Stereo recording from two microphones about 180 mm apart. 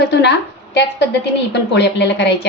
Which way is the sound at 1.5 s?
75° left (ahead or behind).